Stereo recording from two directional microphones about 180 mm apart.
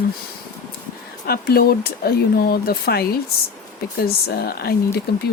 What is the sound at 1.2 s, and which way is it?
Speech, 60° left (ahead or behind).